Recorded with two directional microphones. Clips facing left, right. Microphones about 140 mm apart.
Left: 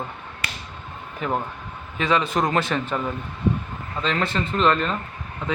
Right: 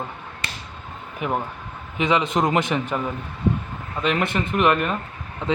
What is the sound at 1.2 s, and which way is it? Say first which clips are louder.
A man's voice: even; 15° right (ahead or behind).